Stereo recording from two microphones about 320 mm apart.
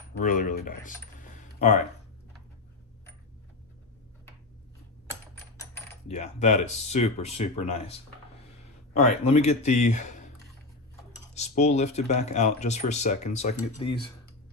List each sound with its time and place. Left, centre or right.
0.2 s speech: left
6.1 s speech: left
11.3 s speech: left